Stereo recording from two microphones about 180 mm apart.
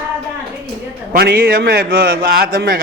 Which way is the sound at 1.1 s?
55° right (ahead or behind).